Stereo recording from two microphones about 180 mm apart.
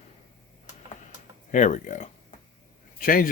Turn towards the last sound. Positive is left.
turn(degrees=50)  # may be behind; listen again after turning